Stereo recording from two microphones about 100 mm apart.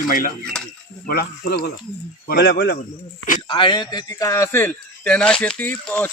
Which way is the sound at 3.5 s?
50° left (ahead or behind).